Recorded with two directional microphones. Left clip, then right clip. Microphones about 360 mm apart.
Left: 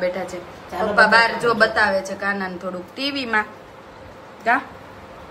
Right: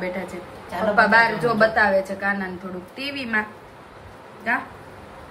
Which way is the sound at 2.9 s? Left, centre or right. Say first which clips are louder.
Left 3 dB; centre.